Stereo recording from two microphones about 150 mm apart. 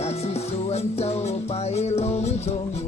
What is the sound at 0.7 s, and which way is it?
Music, 45° left (ahead or behind).